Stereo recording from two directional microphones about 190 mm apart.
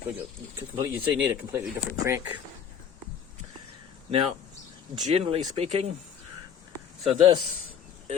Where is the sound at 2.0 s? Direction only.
15° right (ahead or behind).